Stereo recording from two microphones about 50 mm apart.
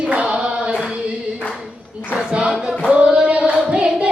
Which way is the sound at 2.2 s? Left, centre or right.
Centre.